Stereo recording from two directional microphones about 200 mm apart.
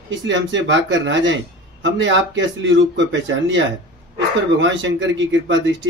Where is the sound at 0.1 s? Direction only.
65° right (ahead or behind).